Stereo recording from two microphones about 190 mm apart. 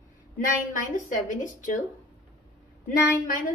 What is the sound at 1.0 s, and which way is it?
Speech, 45° left (ahead or behind).